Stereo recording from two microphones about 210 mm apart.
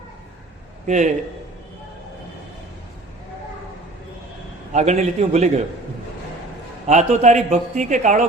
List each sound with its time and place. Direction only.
0.9 s a man's voice: 35° right (ahead or behind)
4.7 s a man's voice: 35° right (ahead or behind)
6.8 s a man's voice: 35° right (ahead or behind)